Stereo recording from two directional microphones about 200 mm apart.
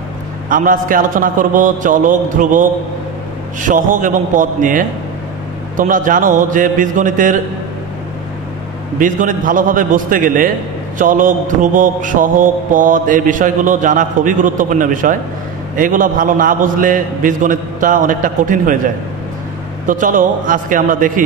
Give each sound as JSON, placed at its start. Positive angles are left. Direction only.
{"t": 0.5, "sound": "mantra", "side_deg": -40}
{"t": 8.9, "sound": "mantra", "side_deg": -40}
{"t": 19.9, "sound": "mantra", "side_deg": -40}